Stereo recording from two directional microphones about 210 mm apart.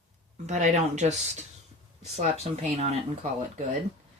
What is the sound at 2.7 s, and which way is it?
Speech, 30° right (ahead or behind).